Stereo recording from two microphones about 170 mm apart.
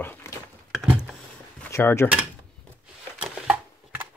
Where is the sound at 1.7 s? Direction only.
15° left (ahead or behind).